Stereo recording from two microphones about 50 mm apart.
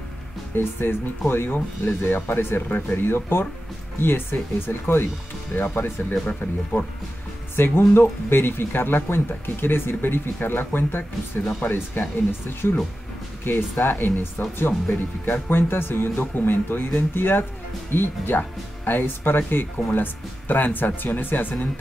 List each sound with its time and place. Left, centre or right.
0.6 s speech: left
7.5 s speech: left